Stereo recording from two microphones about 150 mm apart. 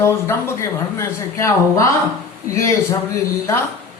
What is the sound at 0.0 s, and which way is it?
Speech, 15° left (ahead or behind).